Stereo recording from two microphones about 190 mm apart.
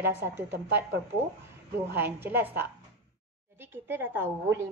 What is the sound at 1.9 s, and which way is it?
Speech, 10° right (ahead or behind).